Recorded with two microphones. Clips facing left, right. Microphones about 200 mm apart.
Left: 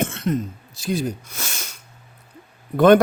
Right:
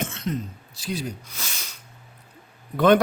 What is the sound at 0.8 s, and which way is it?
Speech, 45° left (ahead or behind).